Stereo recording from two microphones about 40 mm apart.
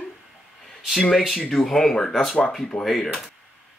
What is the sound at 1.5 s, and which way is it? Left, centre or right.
Speech, centre.